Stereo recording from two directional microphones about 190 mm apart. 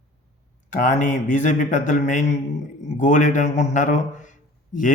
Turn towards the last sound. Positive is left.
turn(degrees=40)  # may be behind; listen again after turning